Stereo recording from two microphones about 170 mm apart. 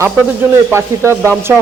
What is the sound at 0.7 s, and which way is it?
Speech, 15° right (ahead or behind).